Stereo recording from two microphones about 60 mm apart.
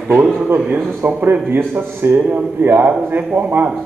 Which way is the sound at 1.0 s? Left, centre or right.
Right.